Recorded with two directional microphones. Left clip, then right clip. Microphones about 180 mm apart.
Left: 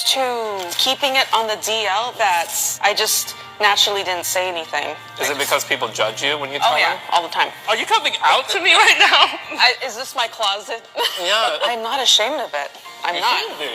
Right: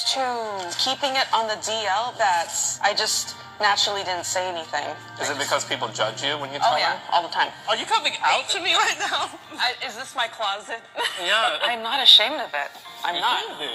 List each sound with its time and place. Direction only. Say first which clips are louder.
0.3 s speech: left 5 dB; 30° left (ahead or behind)